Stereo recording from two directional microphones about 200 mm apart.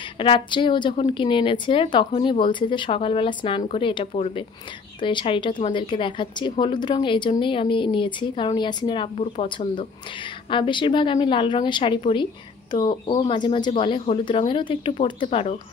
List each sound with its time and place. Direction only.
0.2 s a woman's voice: 25° left (ahead or behind)